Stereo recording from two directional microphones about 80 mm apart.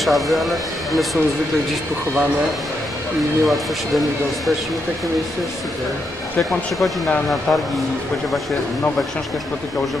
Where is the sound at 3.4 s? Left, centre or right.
Centre.